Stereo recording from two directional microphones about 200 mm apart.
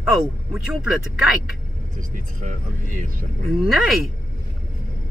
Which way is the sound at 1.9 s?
40° right (ahead or behind).